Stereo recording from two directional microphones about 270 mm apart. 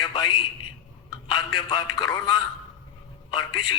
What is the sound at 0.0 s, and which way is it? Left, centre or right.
A man's voice, centre.